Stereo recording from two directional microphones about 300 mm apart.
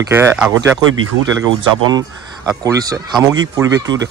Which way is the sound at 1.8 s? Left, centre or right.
Centre.